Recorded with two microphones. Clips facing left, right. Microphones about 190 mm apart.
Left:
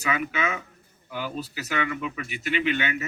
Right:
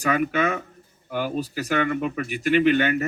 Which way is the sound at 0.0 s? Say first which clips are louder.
Right 6 dB; 45° right (ahead or behind).